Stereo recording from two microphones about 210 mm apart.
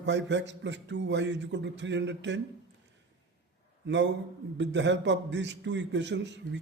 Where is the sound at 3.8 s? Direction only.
55° right (ahead or behind).